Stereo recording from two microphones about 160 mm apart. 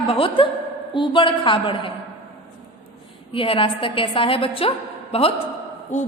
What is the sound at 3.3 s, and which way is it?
A woman's voice, 35° left (ahead or behind).